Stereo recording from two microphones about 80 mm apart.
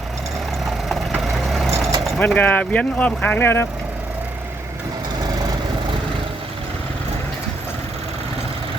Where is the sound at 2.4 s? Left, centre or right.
Centre.